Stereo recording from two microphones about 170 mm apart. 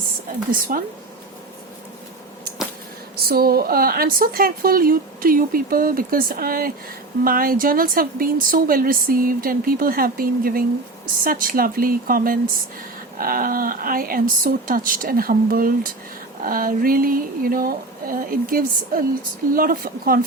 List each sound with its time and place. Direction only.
0.7 s a woman's voice: 55° right (ahead or behind)
3.2 s a woman's voice: 65° right (ahead or behind)